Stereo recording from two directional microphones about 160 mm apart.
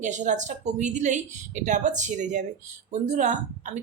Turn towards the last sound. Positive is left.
turn(degrees=-50)  # may be behind; listen again after turning